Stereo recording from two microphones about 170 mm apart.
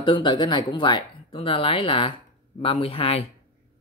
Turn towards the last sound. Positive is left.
turn(degrees=35)  # may be behind; listen again after turning